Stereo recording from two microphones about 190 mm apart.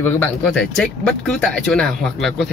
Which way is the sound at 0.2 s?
5° left (ahead or behind).